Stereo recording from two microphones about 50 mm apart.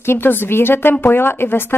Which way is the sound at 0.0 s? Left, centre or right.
Left.